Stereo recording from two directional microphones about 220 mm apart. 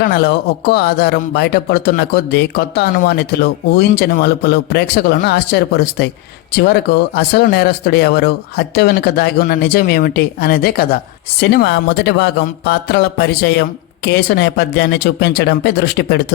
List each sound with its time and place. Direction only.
0.0 s speech: 45° left (ahead or behind)